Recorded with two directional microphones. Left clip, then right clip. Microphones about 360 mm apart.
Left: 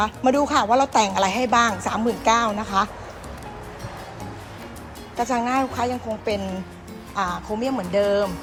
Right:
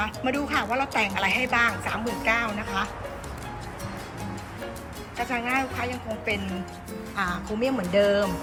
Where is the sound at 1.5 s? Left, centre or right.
Centre.